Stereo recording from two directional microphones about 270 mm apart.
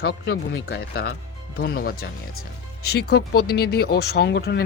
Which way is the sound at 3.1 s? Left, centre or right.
Left.